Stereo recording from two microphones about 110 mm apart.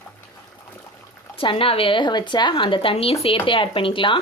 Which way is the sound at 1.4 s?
55° left (ahead or behind).